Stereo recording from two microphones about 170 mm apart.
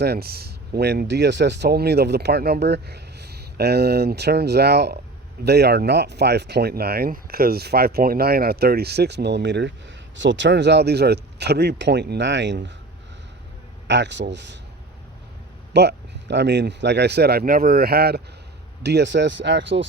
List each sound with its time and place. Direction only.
0.0 s speech: 65° right (ahead or behind); by 12.7 s 90° right
13.8 s speech: 90° right
15.7 s speech: 80° right
18.8 s speech: 85° right